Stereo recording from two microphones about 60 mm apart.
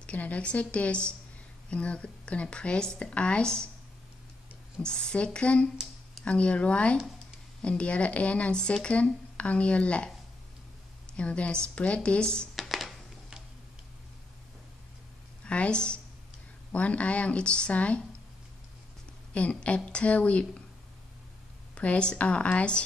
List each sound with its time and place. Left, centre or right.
0.0 s speech: left
4.8 s speech: centre
11.1 s speech: left
12.5 s a sound: centre
15.4 s a woman's voice: centre
19.3 s speech: left
21.7 s speech: centre